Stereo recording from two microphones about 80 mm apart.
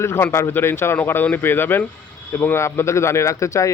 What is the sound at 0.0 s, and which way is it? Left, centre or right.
A man's voice, left.